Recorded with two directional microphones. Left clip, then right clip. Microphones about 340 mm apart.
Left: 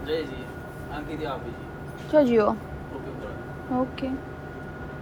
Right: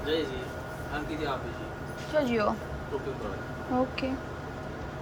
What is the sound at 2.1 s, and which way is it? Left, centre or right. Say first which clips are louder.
Speech: left 7 dB; centre.